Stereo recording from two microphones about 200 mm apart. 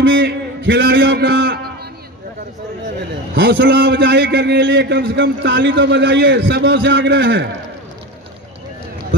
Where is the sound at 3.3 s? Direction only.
60° right (ahead or behind).